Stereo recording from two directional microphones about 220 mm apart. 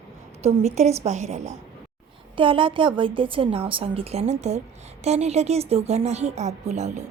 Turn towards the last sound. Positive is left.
turn(degrees=-30)  # may be behind; listen again after turning